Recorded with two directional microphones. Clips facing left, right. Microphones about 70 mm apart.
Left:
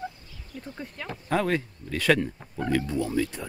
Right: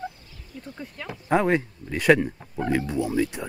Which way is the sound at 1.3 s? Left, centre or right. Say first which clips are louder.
Right 4 dB; right.